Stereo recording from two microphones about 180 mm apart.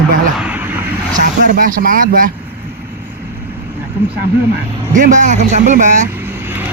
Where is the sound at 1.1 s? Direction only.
50° right (ahead or behind).